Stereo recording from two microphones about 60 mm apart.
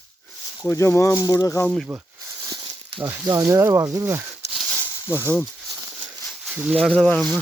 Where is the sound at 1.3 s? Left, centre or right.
Left.